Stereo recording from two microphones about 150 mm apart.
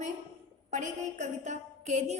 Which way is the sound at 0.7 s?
50° right (ahead or behind).